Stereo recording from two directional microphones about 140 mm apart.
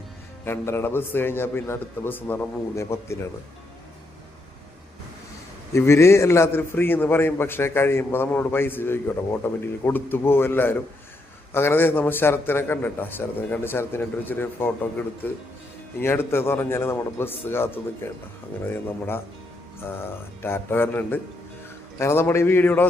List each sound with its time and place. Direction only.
0.4 s a man's voice: 15° left (ahead or behind)
5.7 s a man's voice: 20° left (ahead or behind)